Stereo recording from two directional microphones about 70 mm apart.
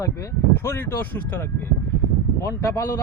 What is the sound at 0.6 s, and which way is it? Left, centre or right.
Speech, left.